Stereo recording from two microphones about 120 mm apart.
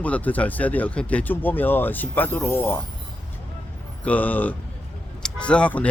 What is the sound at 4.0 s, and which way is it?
Speech, 15° left (ahead or behind).